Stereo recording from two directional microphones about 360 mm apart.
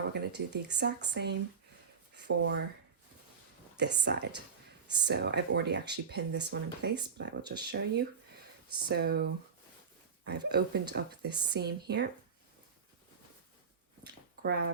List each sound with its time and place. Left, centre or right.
0.1 s speech: right
3.8 s speech: right
14.0 s a sound: right